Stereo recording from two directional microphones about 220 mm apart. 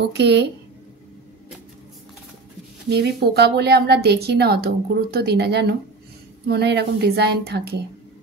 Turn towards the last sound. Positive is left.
turn(degrees=-45)  # may be behind; listen again after turning